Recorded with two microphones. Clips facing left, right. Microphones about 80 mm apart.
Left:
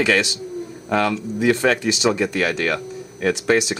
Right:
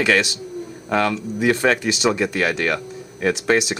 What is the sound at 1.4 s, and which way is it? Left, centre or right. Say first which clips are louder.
Speech: even; right.